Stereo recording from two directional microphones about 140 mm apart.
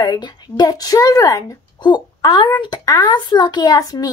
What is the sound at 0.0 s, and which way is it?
A woman's voice, 30° left (ahead or behind).